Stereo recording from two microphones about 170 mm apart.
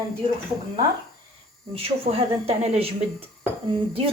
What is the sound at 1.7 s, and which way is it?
A woman's voice, 35° right (ahead or behind).